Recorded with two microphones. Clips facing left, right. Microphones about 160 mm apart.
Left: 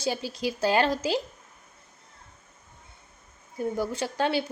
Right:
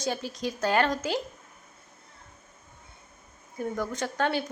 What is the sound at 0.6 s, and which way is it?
Speech, 25° left (ahead or behind).